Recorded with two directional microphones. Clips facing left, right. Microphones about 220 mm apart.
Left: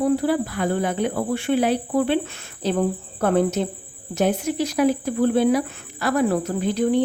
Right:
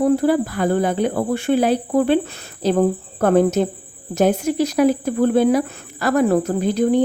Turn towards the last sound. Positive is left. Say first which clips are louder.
# right 3 dB
turn(degrees=-40)  # may be behind; listen again after turning